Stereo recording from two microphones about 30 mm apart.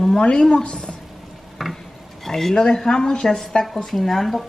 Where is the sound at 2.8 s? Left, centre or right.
Left.